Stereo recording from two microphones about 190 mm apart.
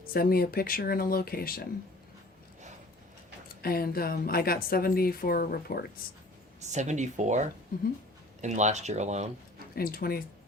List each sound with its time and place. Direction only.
0.1 s a woman's voice: 50° left (ahead or behind)
3.6 s a woman's voice: 50° left (ahead or behind)
6.6 s speech: 40° right (ahead or behind)
9.7 s a woman's voice: 50° left (ahead or behind)